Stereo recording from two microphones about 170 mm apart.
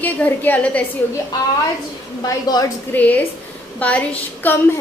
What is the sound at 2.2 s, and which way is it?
Speech, 20° left (ahead or behind).